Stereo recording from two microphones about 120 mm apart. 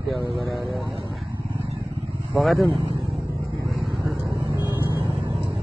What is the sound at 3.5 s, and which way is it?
Vehicle, 25° right (ahead or behind).